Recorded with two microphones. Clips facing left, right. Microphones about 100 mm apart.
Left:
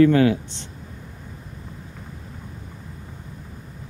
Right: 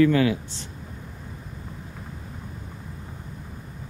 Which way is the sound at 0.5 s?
20° left (ahead or behind).